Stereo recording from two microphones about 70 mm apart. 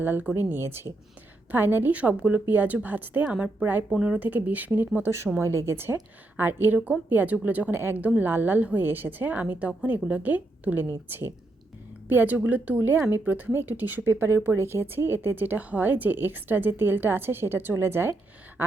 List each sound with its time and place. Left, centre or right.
0.0 s a woman's voice: right
4.9 s a woman's voice: right
10.8 s speech: right